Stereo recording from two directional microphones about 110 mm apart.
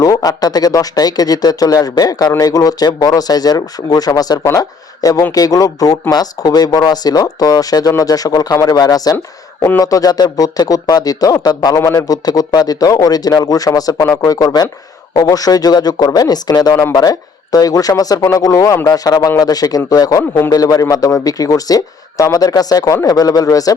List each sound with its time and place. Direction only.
0.0 s speech: 35° left (ahead or behind)
9.1 s speech: 25° left (ahead or behind)